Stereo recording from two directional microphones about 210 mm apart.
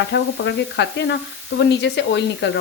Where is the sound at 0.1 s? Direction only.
55° left (ahead or behind).